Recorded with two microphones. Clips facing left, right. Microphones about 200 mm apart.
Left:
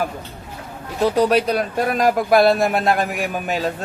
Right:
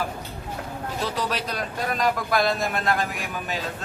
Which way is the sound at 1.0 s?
50° left (ahead or behind).